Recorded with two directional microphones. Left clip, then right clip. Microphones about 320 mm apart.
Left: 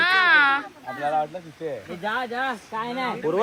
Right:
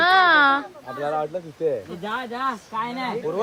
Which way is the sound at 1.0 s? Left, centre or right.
Right.